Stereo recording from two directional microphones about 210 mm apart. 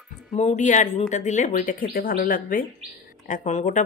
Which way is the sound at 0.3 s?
35° left (ahead or behind).